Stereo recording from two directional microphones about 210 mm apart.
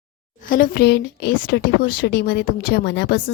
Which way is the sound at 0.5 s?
45° left (ahead or behind).